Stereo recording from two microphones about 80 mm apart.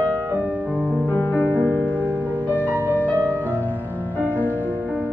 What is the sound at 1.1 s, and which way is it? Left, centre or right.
Music, left.